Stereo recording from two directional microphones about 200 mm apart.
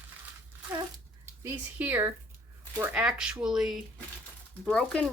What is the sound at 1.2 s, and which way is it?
Speech, 15° right (ahead or behind).